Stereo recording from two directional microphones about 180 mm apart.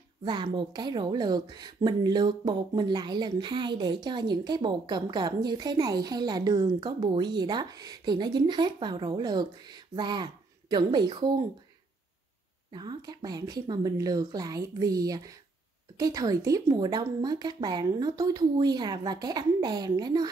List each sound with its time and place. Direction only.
0.2 s a woman's voice: 25° right (ahead or behind)
12.7 s a woman's voice: 25° right (ahead or behind)